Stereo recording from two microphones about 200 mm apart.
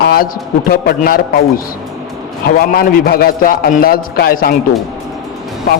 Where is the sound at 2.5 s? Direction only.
45° left (ahead or behind).